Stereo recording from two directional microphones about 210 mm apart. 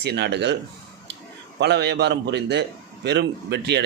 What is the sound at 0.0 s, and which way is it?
Speech, 55° right (ahead or behind).